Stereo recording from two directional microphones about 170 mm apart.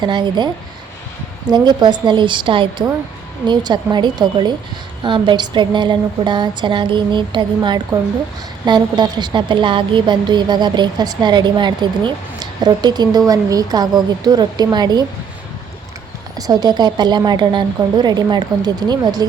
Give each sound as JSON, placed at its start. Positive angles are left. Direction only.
{"t": 0.0, "sound": "a woman's voice", "side_deg": -25}
{"t": 16.3, "sound": "a woman's voice", "side_deg": -25}